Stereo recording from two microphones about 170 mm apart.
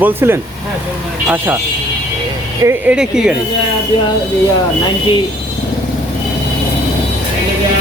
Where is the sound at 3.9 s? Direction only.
30° left (ahead or behind).